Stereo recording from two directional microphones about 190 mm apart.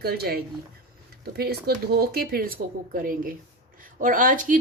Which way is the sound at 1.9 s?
55° right (ahead or behind).